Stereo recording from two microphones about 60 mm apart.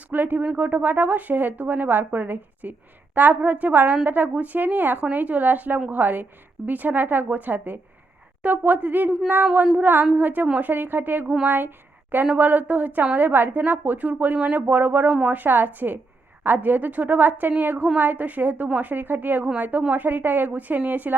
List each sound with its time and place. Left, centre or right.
0.1 s a woman's voice: right
14.3 s a woman's voice: centre
14.7 s a woman's voice: right